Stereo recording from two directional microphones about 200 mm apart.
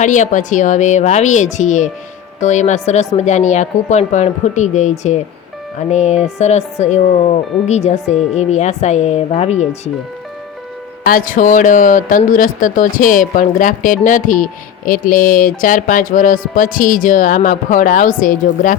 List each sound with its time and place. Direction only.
0.0 s speech: 40° left (ahead or behind)
11.0 s speech: 45° left (ahead or behind)